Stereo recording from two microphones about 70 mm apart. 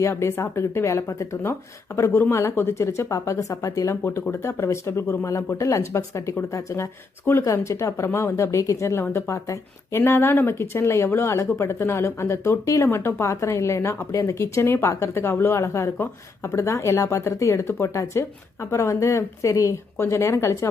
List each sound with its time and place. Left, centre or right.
0.0 s speech: left
4.0 s speech: left